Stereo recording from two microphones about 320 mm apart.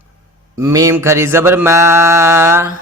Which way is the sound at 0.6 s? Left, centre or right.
Centre.